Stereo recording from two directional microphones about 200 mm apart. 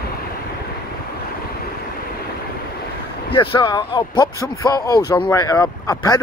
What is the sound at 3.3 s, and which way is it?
Speech, 25° left (ahead or behind).